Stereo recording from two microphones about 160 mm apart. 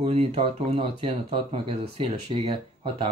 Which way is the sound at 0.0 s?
40° right (ahead or behind).